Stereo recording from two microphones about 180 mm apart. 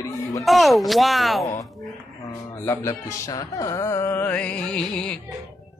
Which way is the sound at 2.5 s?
15° left (ahead or behind).